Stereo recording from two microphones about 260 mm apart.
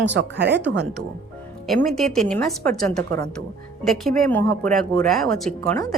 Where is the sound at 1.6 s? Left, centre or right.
Centre.